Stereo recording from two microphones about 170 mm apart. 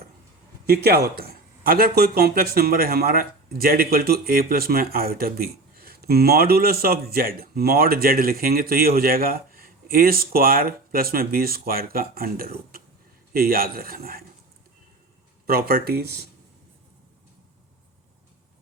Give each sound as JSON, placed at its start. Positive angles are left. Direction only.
{"t": 0.7, "sound": "a man's voice", "side_deg": -70}
{"t": 15.4, "sound": "a man's voice", "side_deg": -60}